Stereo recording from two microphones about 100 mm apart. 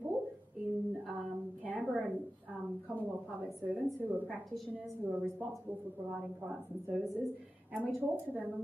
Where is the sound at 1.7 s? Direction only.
15° right (ahead or behind).